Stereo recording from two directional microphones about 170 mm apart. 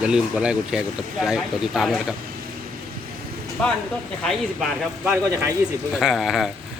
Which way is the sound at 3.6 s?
5° left (ahead or behind).